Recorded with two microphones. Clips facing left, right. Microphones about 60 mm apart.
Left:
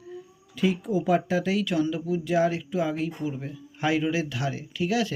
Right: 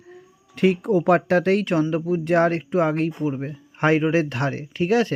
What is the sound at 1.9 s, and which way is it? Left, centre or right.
Speech, right.